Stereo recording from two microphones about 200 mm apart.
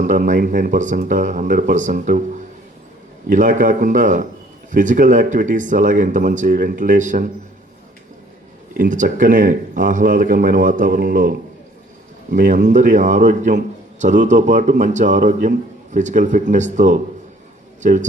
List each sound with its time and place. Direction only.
0.0 s a man's voice: 40° right (ahead or behind)
8.8 s a man's voice: 40° right (ahead or behind)